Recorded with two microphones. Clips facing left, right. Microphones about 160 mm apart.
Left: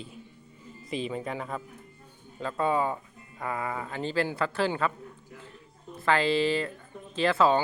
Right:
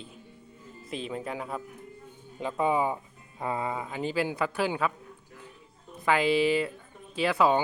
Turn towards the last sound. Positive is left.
turn(degrees=-15)  # may be behind; listen again after turning